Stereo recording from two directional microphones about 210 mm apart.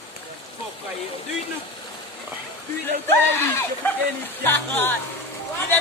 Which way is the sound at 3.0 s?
10° left (ahead or behind).